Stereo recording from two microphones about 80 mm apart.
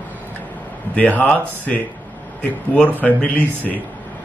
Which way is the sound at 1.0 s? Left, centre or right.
Centre.